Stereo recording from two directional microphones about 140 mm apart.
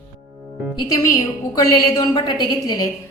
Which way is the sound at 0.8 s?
25° left (ahead or behind).